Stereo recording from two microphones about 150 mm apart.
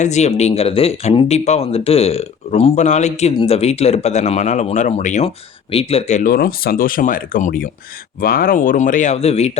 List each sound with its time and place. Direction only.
0.0 s speech: 50° left (ahead or behind)
6.2 s speech: 80° left
8.2 s speech: 75° left (ahead or behind); by 9.5 s 45° left (ahead or behind)